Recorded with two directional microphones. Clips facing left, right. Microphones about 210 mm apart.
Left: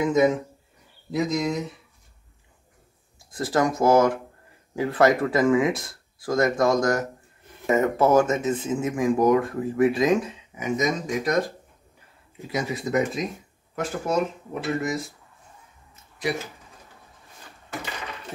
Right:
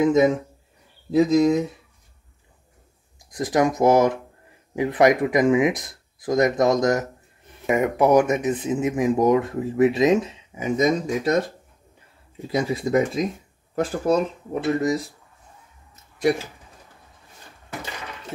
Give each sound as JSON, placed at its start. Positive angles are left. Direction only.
{"t": 0.0, "sound": "speech", "side_deg": -30}
{"t": 3.3, "sound": "speech", "side_deg": -15}
{"t": 12.4, "sound": "speech", "side_deg": -30}
{"t": 15.9, "sound": "a sound", "side_deg": -45}